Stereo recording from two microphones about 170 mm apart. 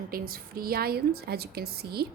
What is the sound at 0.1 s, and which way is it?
A woman's voice, 60° right (ahead or behind).